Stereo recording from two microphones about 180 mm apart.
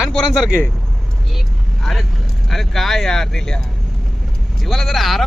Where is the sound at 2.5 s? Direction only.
Centre (ahead or behind).